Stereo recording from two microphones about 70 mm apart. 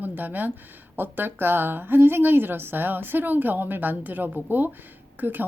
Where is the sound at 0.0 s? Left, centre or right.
Right.